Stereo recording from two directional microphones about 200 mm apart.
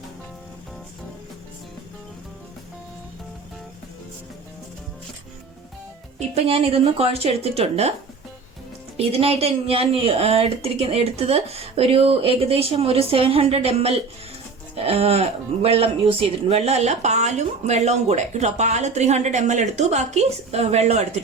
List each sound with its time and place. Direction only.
6.1 s speech: 30° right (ahead or behind)
9.0 s speech: 30° right (ahead or behind)